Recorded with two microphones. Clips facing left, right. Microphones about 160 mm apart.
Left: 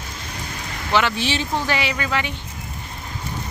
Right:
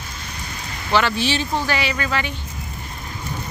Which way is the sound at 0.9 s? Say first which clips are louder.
Right 1 dB; 20° left (ahead or behind).